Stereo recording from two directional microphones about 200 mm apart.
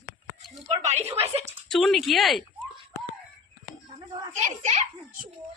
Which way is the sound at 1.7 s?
Centre (ahead or behind).